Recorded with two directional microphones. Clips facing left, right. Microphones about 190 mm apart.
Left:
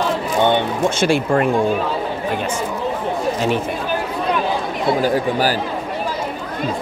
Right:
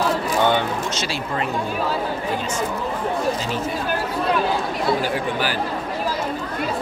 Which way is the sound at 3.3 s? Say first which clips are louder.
Left 7 dB; 65° left (ahead or behind).